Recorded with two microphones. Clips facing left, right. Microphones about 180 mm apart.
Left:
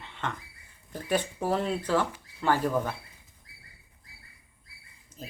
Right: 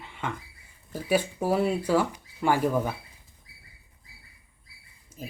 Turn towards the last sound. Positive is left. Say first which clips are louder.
# right 3 dB
turn(degrees=-10)  # may be behind; listen again after turning